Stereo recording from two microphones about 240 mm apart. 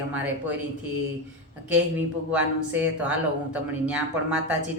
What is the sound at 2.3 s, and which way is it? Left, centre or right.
A woman's voice, centre.